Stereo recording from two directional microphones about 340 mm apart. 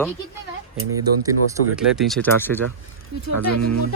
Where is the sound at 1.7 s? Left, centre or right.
Centre.